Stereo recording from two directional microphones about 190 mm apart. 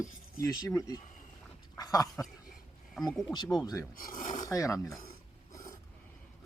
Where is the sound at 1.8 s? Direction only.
20° left (ahead or behind).